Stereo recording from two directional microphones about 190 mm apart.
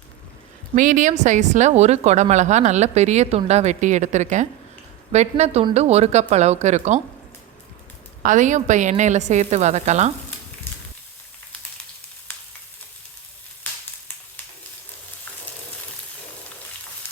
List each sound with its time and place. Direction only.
0.8 s a woman's voice: 45° right (ahead or behind)
8.2 s a woman's voice: 40° right (ahead or behind)